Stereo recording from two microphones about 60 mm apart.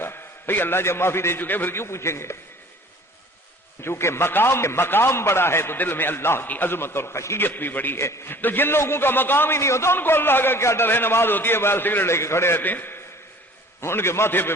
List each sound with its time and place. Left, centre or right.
0.0 s a man's voice: left
3.8 s a man's voice: left
7.3 s a man's voice: left
7.9 s a man's voice: left
8.3 s a man's voice: left
9.6 s a man's voice: left
10.0 s a man's voice: left
12.1 s a man's voice: left
12.6 s a man's voice: left
13.8 s a man's voice: left